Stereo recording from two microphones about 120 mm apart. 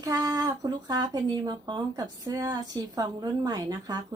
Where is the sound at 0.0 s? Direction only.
30° right (ahead or behind).